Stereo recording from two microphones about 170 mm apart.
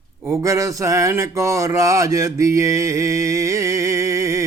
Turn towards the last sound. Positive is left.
turn(degrees=-20)  # may be behind; listen again after turning